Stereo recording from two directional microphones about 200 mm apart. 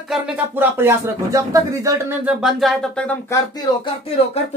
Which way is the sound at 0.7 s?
15° right (ahead or behind).